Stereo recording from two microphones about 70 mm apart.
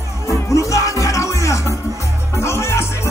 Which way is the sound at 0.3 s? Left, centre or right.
Left.